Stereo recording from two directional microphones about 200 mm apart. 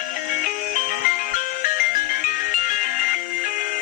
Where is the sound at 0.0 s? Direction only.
45° left (ahead or behind).